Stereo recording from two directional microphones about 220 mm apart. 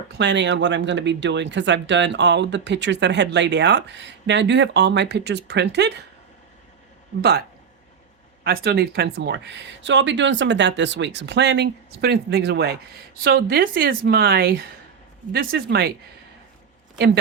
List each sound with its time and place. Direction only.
0.2 s speech: 50° right (ahead or behind)
7.2 s speech: 45° right (ahead or behind)
8.4 s speech: 45° right (ahead or behind)